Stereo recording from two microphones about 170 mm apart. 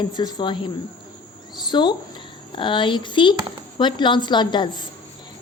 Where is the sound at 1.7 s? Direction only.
25° left (ahead or behind).